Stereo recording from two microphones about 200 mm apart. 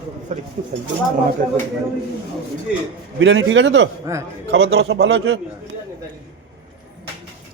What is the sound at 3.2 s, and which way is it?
A man's voice, 65° right (ahead or behind).